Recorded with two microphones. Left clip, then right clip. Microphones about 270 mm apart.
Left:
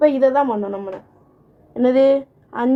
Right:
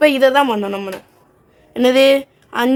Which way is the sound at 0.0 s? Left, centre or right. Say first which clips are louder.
Right 3 dB; right.